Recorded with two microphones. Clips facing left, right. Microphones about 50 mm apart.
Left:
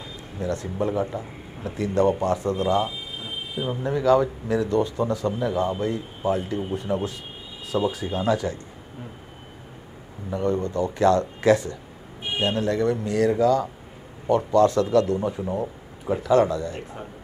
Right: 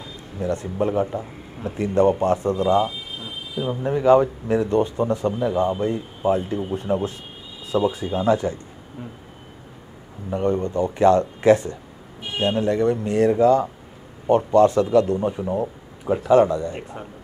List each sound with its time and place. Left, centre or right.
0.4 s a man's voice: right
10.3 s speech: right